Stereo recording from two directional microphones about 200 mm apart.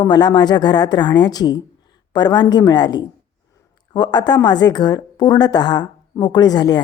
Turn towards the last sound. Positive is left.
turn(degrees=20)  # may be behind; listen again after turning